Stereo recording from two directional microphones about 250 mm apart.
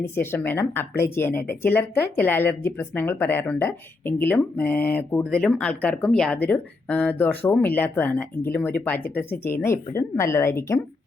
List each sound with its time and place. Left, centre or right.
0.0 s speech: centre